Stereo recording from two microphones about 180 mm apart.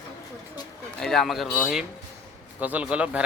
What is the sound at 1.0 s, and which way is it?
Speech, centre (ahead or behind).